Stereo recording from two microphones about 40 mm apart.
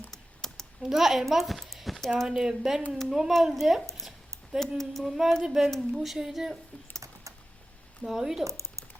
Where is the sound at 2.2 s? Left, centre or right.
Centre.